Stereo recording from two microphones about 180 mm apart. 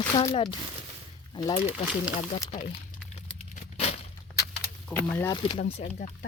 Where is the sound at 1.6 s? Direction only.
5° right (ahead or behind).